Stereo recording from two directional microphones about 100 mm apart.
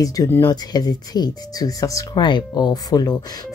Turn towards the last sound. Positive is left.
turn(degrees=45)  # may be behind; listen again after turning